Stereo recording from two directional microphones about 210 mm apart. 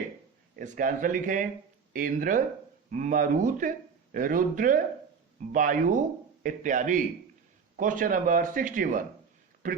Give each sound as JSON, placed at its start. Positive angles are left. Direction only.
{"t": 0.5, "sound": "speech", "side_deg": -40}